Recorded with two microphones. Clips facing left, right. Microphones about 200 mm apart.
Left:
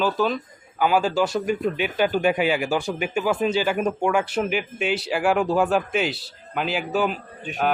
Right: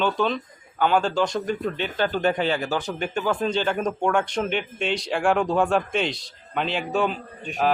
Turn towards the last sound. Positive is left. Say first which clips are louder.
# right 1 dB
turn(degrees=5)  # may be behind; listen again after turning